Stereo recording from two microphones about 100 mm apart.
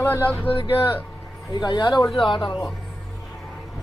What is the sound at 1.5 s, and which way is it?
Speech, 45° left (ahead or behind).